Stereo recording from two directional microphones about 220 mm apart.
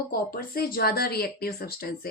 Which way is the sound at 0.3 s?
45° left (ahead or behind).